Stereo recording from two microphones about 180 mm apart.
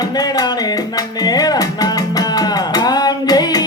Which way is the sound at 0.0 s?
20° left (ahead or behind).